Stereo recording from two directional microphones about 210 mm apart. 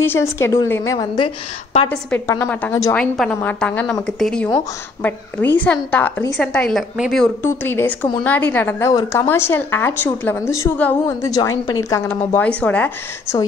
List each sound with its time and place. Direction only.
0.0 s a woman's voice: 10° left (ahead or behind)
0.9 s a woman's voice: 25° left (ahead or behind)
1.9 s a woman's voice: 10° left (ahead or behind)
5.6 s a woman's voice: 5° left (ahead or behind)
7.4 s a woman's voice: 10° left (ahead or behind)